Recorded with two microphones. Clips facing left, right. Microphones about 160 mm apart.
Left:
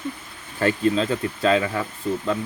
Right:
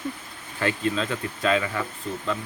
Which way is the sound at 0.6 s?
40° left (ahead or behind).